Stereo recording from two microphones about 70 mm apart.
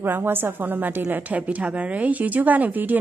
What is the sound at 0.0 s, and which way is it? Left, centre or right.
A woman's voice, right.